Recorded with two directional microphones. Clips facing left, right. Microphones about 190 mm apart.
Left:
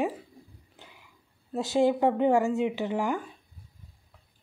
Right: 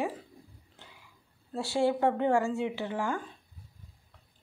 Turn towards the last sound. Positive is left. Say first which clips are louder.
# left 4 dB
turn(degrees=15)  # may be behind; listen again after turning